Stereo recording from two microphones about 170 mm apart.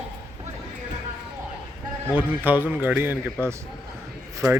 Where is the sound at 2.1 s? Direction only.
10° right (ahead or behind).